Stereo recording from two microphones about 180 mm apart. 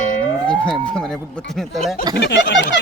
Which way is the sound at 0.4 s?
5° left (ahead or behind).